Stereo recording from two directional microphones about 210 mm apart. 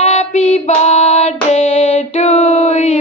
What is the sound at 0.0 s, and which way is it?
Child singing, 30° left (ahead or behind).